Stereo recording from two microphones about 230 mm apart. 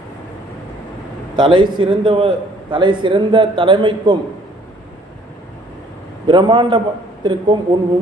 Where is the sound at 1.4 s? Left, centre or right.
Right.